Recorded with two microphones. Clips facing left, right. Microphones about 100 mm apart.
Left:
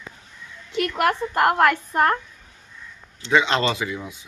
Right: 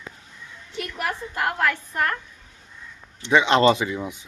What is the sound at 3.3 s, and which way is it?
Speech, 20° right (ahead or behind).